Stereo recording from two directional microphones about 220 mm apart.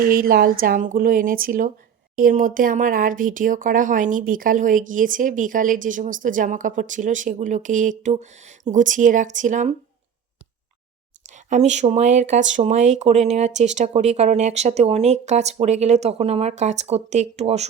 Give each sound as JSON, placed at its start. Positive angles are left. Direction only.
{"t": 0.0, "sound": "speech", "side_deg": -40}
{"t": 11.4, "sound": "speech", "side_deg": -35}